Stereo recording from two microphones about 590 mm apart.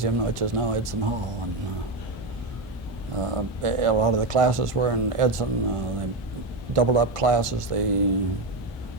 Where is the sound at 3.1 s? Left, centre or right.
Right.